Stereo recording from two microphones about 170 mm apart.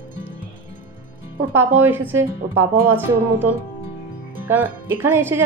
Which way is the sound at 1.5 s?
10° right (ahead or behind).